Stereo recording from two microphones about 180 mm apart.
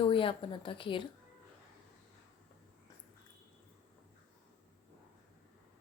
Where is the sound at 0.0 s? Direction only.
30° left (ahead or behind).